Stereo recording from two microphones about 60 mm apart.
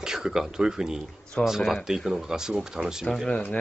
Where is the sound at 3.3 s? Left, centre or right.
Centre.